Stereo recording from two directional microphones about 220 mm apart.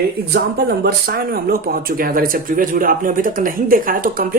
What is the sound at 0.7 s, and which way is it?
Speech, 45° right (ahead or behind).